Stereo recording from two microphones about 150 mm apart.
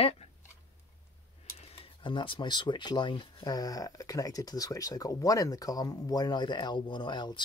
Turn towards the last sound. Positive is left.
turn(degrees=30)  # may be behind; listen again after turning